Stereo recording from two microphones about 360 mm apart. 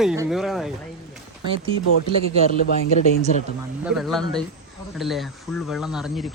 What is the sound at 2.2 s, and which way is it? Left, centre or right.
Speech, centre.